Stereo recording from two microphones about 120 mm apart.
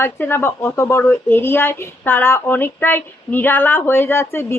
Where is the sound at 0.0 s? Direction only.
20° left (ahead or behind).